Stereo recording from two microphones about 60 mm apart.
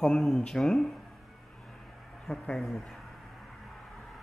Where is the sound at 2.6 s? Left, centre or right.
Centre.